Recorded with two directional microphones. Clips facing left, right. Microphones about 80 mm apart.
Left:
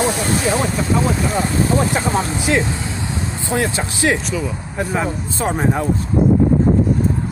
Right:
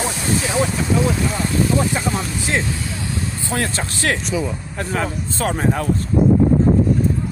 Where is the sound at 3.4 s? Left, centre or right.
Centre.